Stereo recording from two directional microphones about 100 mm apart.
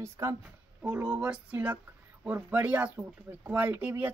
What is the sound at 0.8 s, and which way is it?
Speech, 10° right (ahead or behind).